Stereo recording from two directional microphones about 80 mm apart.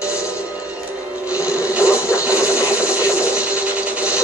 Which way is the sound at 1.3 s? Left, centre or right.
Centre.